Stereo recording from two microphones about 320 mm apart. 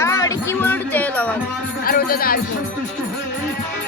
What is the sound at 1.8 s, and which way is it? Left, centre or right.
Speech, left.